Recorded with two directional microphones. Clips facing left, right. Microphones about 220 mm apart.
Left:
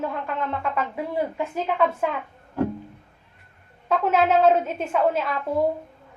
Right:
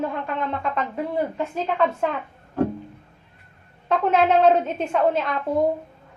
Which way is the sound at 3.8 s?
5° left (ahead or behind).